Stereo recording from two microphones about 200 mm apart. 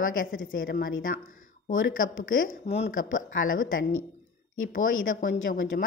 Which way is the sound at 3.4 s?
45° left (ahead or behind).